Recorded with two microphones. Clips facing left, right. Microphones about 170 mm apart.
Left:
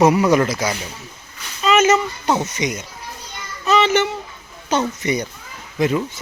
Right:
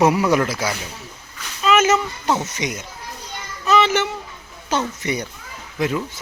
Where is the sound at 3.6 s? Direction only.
5° right (ahead or behind).